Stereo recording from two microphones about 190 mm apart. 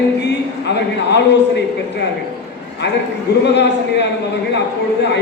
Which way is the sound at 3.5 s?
65° left (ahead or behind).